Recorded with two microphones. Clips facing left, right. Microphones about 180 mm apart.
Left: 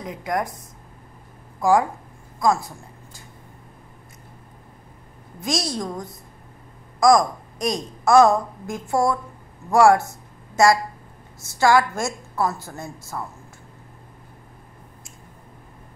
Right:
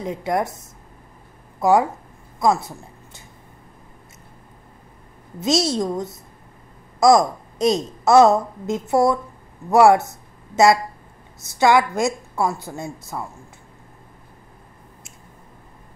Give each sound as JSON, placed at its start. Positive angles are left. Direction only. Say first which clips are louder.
{"t": 0.0, "sound": "a woman's voice", "louder": "right 3 dB", "side_deg": -25}
{"t": 1.6, "sound": "speech", "louder": "right 2 dB", "side_deg": -25}
{"t": 5.4, "sound": "a woman's voice", "louder": "right 6 dB", "side_deg": -25}